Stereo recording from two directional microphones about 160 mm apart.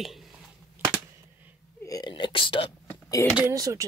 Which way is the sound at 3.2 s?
15° left (ahead or behind).